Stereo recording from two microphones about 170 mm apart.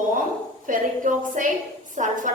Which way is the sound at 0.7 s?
50° right (ahead or behind).